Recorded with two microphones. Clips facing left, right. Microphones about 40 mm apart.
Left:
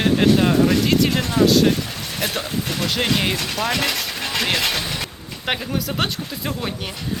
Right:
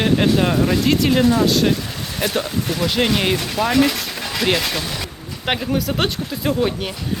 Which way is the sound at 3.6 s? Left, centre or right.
Left.